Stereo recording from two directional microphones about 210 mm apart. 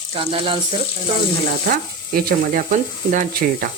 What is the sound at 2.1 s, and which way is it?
Speech, 45° right (ahead or behind).